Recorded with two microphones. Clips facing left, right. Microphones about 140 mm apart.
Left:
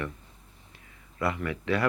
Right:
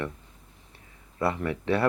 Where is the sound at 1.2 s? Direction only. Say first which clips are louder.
Right 2 dB; 30° right (ahead or behind).